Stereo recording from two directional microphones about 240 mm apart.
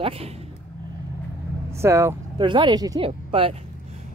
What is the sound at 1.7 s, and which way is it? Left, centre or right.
Speech, centre.